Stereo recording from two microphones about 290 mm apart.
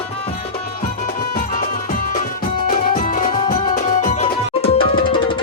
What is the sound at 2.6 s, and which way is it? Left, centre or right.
Music, left.